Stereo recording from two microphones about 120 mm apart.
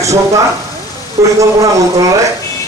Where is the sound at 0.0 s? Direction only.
25° right (ahead or behind).